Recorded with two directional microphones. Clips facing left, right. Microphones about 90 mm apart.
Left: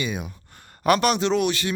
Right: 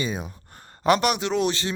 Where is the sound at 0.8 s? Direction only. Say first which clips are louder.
Left 1 dB; 20° right (ahead or behind).